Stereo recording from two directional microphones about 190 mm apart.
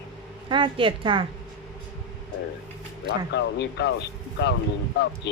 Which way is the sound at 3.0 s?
65° left (ahead or behind).